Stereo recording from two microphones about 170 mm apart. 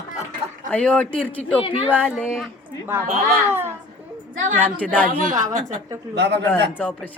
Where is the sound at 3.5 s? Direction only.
15° right (ahead or behind).